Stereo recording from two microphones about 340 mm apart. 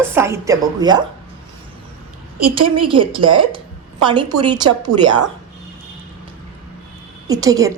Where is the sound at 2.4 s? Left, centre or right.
Right.